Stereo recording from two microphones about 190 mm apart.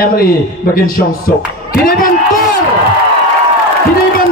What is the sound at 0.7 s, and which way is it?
Speech, 50° left (ahead or behind).